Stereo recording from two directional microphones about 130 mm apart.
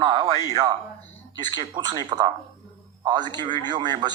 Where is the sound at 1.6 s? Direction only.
35° right (ahead or behind).